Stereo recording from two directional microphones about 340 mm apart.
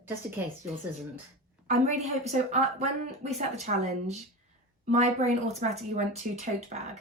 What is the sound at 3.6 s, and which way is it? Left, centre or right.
A woman's voice, centre.